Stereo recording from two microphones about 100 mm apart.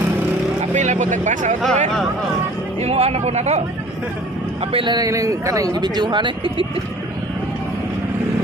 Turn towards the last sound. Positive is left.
turn(degrees=-55)  # may be behind; listen again after turning